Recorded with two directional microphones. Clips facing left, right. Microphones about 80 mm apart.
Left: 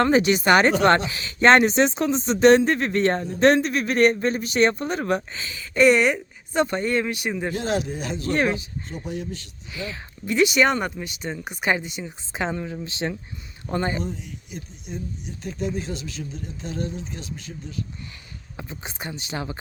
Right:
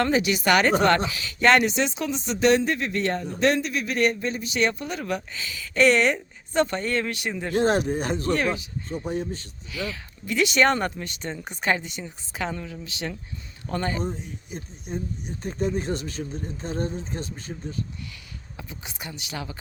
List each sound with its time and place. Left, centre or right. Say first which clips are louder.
0.0 s speech: left 4 dB; left
5.7 s speech: left 2 dB; centre
7.5 s speech: right 4 dB; right
8.3 s speech: left 3 dB; left
8.9 s speech: right 3 dB; right
9.7 s speech: right 1 dB; left
10.6 s speech: even; centre; by 14.0 s left
14.0 s speech: right 1 dB; right
18.5 s speech: left 4 dB; left